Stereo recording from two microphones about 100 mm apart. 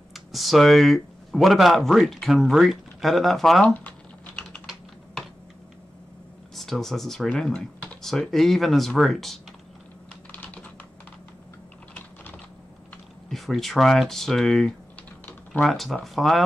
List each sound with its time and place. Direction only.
0.1 s speech: centre (ahead or behind)
3.6 s speech: 15° left (ahead or behind)
6.5 s speech: 5° left (ahead or behind)
10.3 s typing: 15° left (ahead or behind)
13.3 s speech: centre (ahead or behind)
15.2 s typing: 15° left (ahead or behind)
15.7 s speech: centre (ahead or behind)